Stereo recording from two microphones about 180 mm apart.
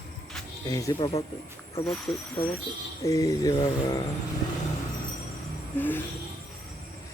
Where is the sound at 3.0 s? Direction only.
15° left (ahead or behind).